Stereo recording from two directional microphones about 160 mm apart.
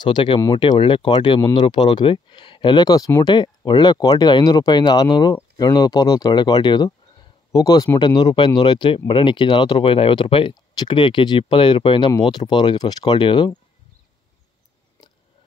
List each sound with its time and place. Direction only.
0.0 s speech: 30° left (ahead or behind)
8.2 s speech: 30° left (ahead or behind)